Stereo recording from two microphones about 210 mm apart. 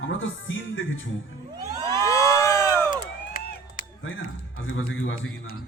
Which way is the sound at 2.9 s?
40° left (ahead or behind).